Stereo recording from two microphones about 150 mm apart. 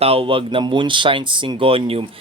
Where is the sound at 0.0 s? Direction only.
40° right (ahead or behind).